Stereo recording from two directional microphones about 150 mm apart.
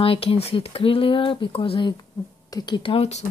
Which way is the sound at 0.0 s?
40° left (ahead or behind).